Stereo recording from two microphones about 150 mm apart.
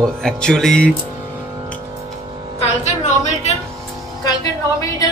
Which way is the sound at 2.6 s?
50° left (ahead or behind).